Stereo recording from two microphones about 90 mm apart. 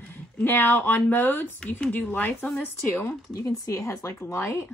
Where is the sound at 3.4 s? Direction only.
35° left (ahead or behind).